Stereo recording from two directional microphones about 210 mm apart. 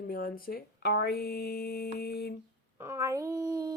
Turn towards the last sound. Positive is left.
turn(degrees=-15)  # may be behind; listen again after turning